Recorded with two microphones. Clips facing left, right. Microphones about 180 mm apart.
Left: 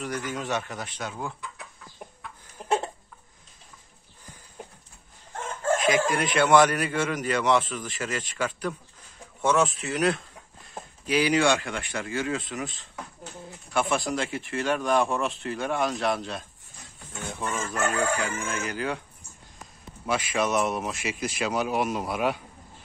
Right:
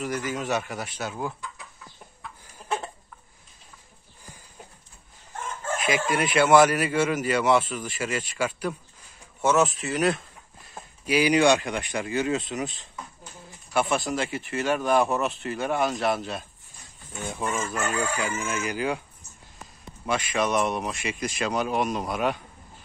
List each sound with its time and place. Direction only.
0.0 s a man's voice: 5° right (ahead or behind)
6.1 s a man's voice: 5° right (ahead or behind)
11.1 s a man's voice: 15° right (ahead or behind)
13.7 s a man's voice: centre (ahead or behind)
20.1 s speech: 10° left (ahead or behind)